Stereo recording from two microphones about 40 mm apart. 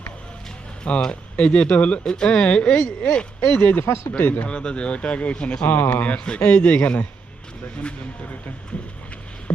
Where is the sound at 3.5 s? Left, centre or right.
Left.